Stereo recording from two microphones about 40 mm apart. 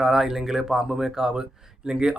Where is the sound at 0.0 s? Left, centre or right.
Centre.